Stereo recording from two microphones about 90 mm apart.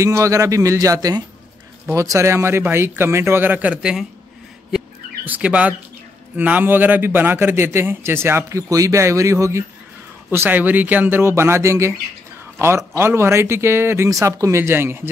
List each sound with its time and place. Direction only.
0.0 s a man's voice: 35° right (ahead or behind); by 4.0 s 10° right (ahead or behind)
5.2 s a man's voice: 15° right (ahead or behind); by 9.7 s 35° right (ahead or behind)
10.3 s a man's voice: 25° right (ahead or behind)